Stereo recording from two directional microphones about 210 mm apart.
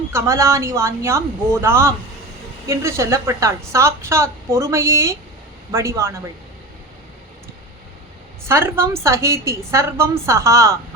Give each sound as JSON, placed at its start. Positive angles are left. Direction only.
{"t": 0.1, "sound": "a woman's voice", "side_deg": -15}
{"t": 8.4, "sound": "a woman's voice", "side_deg": -10}